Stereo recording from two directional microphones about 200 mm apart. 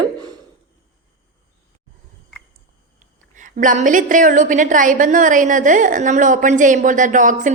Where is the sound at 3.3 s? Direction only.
40° right (ahead or behind).